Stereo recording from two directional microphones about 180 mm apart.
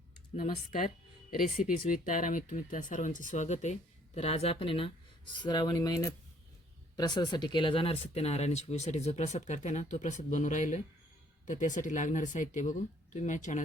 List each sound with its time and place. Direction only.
0.3 s speech: 40° left (ahead or behind)
0.7 s speech: 50° left (ahead or behind)